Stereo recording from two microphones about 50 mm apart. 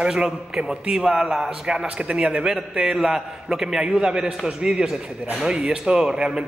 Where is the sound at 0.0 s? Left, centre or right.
Centre.